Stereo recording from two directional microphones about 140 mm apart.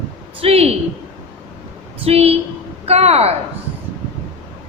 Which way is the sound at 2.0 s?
45° right (ahead or behind).